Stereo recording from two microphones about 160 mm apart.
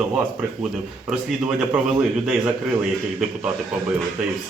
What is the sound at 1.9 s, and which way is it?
Speech, 10° right (ahead or behind).